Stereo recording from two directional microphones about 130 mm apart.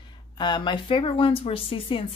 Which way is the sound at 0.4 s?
35° left (ahead or behind).